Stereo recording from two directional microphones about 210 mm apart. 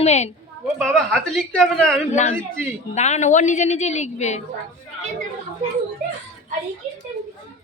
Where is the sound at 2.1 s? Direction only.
35° left (ahead or behind).